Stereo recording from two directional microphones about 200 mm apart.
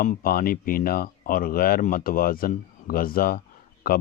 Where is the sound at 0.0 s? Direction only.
45° left (ahead or behind).